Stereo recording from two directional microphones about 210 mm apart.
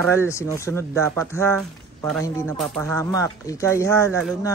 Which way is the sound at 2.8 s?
15° left (ahead or behind).